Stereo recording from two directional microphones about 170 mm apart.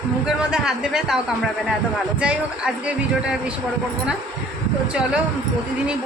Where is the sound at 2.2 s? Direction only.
5° right (ahead or behind).